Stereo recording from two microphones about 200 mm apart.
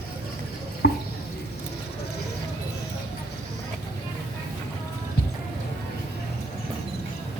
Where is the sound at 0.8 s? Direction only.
55° left (ahead or behind).